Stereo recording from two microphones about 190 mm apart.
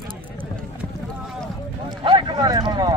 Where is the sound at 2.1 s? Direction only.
25° right (ahead or behind).